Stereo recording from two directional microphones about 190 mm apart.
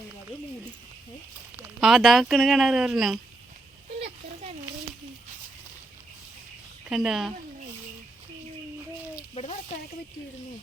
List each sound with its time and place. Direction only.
1.5 s speech: centre (ahead or behind)
6.9 s speech: centre (ahead or behind)
9.3 s a sound: 35° left (ahead or behind)